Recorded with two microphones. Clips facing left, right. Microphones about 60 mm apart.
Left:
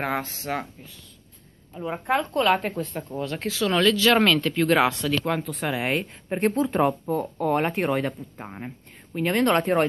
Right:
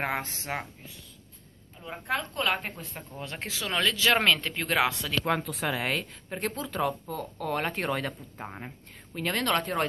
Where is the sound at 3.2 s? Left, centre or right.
Centre.